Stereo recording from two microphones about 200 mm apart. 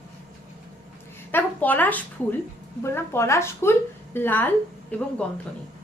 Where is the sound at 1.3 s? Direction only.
10° left (ahead or behind).